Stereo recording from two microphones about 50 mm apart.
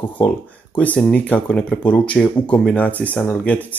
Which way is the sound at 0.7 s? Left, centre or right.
Left.